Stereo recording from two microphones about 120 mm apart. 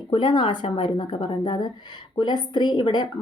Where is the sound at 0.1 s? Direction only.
45° left (ahead or behind).